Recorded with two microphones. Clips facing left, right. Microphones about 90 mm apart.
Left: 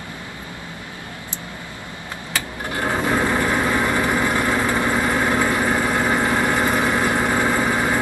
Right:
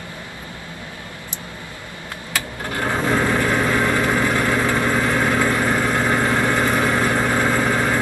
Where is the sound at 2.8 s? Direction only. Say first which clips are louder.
Right 1 dB; 15° left (ahead or behind).